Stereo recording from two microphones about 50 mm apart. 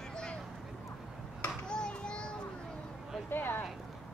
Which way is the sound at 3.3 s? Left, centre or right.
Left.